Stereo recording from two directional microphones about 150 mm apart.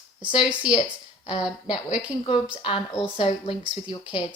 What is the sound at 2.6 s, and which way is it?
Speech, 35° left (ahead or behind).